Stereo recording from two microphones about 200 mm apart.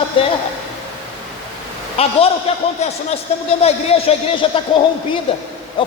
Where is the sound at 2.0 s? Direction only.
30° left (ahead or behind).